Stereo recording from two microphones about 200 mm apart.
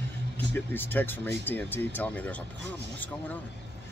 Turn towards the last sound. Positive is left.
turn(degrees=10)  # may be behind; listen again after turning